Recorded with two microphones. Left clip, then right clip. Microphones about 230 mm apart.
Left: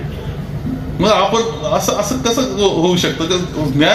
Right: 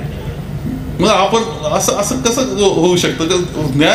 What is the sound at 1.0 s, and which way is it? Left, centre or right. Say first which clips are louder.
Speech: right 1 dB; right.